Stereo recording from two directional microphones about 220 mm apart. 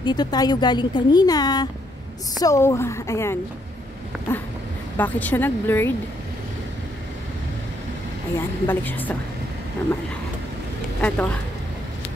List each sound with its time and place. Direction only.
0.0 s a woman's voice: 20° left (ahead or behind)
8.4 s a woman's voice: 10° left (ahead or behind)
11.0 s a woman's voice: 5° left (ahead or behind)